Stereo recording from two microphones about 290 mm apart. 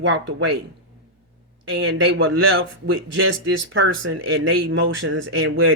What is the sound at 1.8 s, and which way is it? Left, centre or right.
A woman's voice, right.